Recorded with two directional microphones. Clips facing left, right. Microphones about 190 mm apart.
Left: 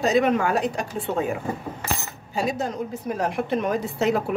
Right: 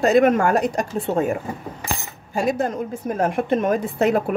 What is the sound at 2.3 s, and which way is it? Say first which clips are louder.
A woman's voice: right 4 dB; 55° right (ahead or behind).